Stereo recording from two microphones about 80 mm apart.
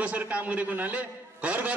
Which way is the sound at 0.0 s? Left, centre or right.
Centre.